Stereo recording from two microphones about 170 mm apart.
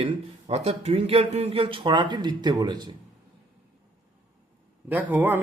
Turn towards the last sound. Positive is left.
turn(degrees=-10)  # may be behind; listen again after turning